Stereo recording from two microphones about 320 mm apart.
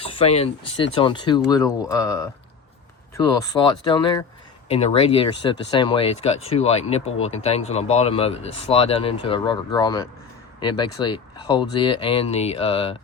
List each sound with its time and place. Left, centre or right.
0.0 s speech: centre
3.3 s speech: centre